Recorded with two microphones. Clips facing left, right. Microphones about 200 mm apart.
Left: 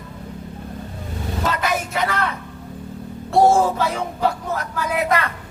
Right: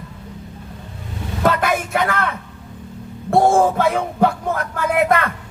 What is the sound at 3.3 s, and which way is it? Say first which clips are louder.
Speech: right 1 dB; 50° right (ahead or behind).